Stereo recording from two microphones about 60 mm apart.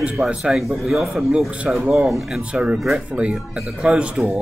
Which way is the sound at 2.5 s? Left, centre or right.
Centre.